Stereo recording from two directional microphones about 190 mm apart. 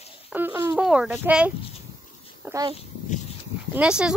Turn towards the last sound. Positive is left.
turn(degrees=-5)  # may be behind; listen again after turning